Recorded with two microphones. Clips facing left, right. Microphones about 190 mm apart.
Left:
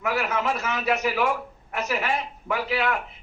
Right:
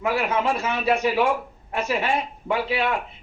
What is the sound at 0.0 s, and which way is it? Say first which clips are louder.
Speech: right 3 dB; 30° right (ahead or behind).